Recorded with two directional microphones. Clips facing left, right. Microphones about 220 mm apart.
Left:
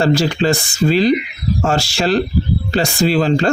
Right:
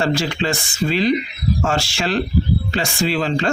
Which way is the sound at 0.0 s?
35° left (ahead or behind).